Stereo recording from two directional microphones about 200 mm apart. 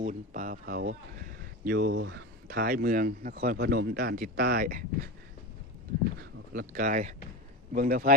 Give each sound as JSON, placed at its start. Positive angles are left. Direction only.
{"t": 0.0, "sound": "speech", "side_deg": -40}
{"t": 1.9, "sound": "speech", "side_deg": -70}
{"t": 2.5, "sound": "speech", "side_deg": -45}
{"t": 6.5, "sound": "speech", "side_deg": -45}